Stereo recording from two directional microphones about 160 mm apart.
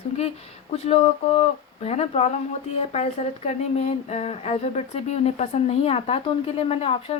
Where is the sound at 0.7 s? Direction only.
40° left (ahead or behind).